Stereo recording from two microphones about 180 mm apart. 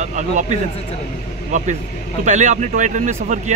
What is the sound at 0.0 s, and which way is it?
Speech, 45° right (ahead or behind).